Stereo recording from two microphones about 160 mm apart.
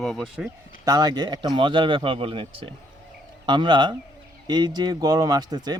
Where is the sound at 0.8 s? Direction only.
25° right (ahead or behind).